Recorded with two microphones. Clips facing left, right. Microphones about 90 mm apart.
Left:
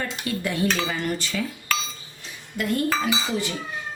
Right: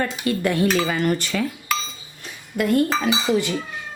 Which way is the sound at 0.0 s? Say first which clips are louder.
Right 6 dB; 60° right (ahead or behind).